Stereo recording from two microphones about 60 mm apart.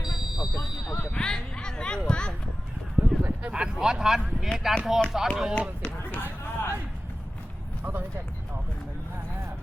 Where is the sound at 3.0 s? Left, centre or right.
Centre.